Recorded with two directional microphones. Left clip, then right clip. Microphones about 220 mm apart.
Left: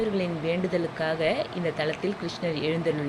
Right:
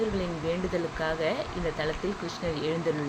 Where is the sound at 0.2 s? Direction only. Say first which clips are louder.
Left 3 dB; 10° left (ahead or behind).